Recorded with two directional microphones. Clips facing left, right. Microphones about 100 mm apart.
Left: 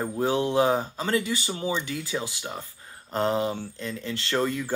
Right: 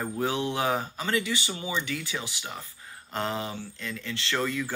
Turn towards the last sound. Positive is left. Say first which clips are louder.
# left 3 dB
turn(degrees=30)  # may be behind; listen again after turning